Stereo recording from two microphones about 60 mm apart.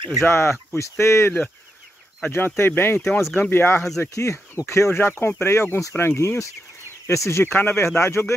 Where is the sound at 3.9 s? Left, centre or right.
Left.